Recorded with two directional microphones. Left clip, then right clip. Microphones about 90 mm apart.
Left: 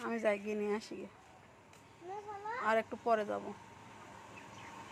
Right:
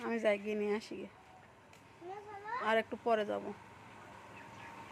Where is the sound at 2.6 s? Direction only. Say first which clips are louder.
Even; 30° right (ahead or behind).